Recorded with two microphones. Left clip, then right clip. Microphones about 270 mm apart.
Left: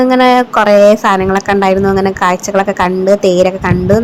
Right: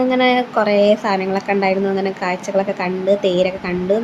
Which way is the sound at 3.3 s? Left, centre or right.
Left.